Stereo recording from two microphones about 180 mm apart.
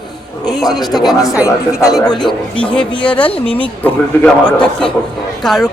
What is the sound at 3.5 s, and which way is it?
A woman's voice, 10° left (ahead or behind).